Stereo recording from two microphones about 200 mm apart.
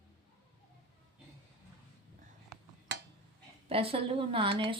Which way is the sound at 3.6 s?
30° right (ahead or behind).